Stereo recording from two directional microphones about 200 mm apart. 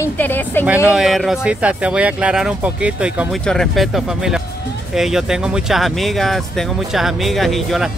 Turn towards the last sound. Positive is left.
turn(degrees=0)  # may be behind; listen again after turning